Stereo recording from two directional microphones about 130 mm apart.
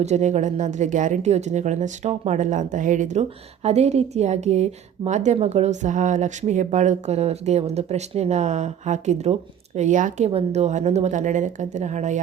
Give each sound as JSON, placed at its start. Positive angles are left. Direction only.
{"t": 0.0, "sound": "speech", "side_deg": -60}
{"t": 10.2, "sound": "speech", "side_deg": -55}